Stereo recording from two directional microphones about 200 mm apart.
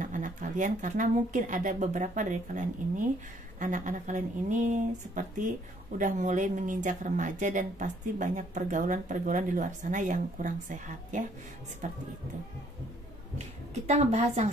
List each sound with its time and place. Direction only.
0.0 s speech: 40° right (ahead or behind)
13.8 s speech: 35° right (ahead or behind)